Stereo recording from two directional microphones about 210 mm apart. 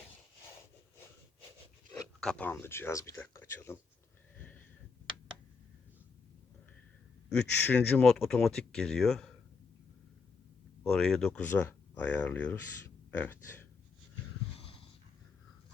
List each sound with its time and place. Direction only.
1.9 s speech: 5° left (ahead or behind)
7.5 s speech: 10° left (ahead or behind)
10.8 s speech: 5° left (ahead or behind)
14.6 s a sound: 25° left (ahead or behind)